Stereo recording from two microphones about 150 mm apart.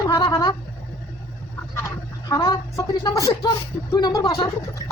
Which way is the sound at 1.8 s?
20° left (ahead or behind).